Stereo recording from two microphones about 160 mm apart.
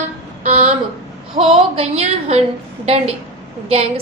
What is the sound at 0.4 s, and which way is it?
A woman's voice, 40° right (ahead or behind).